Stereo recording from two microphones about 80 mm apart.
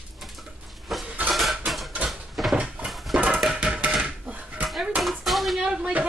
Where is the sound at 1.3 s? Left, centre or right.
Centre.